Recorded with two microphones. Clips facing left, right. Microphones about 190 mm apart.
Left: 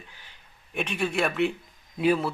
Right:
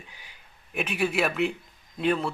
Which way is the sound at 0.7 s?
5° right (ahead or behind).